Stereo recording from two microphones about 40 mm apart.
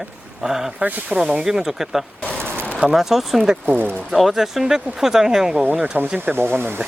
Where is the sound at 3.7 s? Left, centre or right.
Right.